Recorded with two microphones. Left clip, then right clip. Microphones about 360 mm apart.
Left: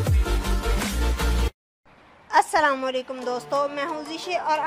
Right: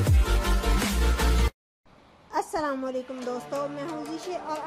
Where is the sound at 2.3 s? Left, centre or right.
Left.